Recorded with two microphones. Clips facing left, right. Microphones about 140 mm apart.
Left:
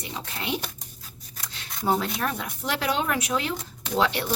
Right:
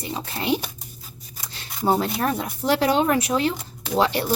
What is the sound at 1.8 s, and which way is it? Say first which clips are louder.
Speech: right 4 dB; 35° right (ahead or behind).